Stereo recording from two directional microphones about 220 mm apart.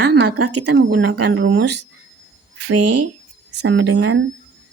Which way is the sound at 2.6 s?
90° right.